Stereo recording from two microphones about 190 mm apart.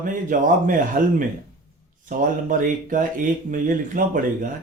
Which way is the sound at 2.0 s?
45° right (ahead or behind).